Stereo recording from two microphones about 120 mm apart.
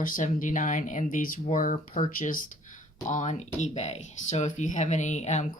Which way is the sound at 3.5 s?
70° left (ahead or behind).